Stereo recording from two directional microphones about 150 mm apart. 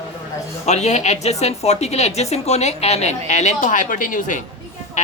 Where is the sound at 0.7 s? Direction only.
50° left (ahead or behind).